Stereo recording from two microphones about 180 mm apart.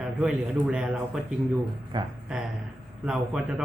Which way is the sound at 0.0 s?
5° right (ahead or behind).